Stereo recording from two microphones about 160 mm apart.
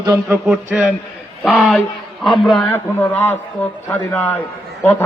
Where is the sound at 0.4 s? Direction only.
5° right (ahead or behind).